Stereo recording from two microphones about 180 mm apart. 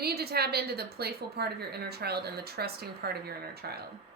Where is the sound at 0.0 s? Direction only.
60° right (ahead or behind).